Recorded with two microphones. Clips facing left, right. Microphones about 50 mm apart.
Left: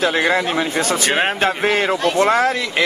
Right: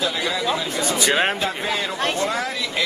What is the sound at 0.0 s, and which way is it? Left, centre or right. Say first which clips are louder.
Speech: left 6 dB; left.